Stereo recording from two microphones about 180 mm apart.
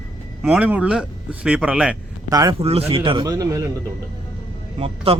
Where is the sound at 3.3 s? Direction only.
20° right (ahead or behind).